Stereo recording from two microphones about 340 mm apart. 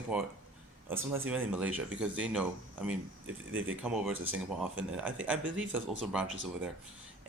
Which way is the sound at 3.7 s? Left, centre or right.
Centre.